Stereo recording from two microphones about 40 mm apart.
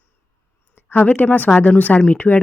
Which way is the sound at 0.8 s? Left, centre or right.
Left.